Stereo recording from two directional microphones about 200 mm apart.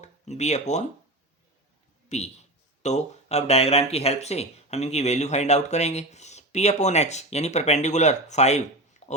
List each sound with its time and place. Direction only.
0.0 s speech: 35° left (ahead or behind)
2.0 s a man's voice: 35° left (ahead or behind)